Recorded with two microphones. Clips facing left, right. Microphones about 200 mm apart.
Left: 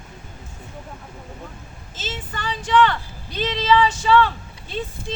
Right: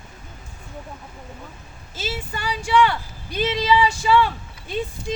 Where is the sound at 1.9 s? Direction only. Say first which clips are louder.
Right 2 dB; 10° right (ahead or behind).